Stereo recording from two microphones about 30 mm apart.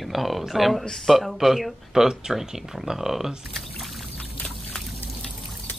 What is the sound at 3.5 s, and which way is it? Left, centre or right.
Pour, centre.